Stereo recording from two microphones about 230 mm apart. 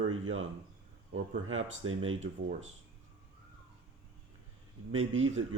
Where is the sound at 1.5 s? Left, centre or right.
Right.